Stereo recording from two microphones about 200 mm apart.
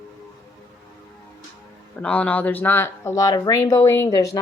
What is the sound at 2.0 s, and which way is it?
A woman's voice, 5° left (ahead or behind).